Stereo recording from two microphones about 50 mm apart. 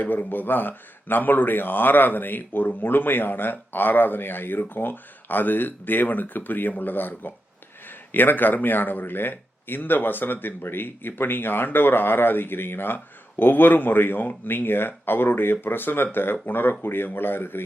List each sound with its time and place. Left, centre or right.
0.0 s a man's voice: left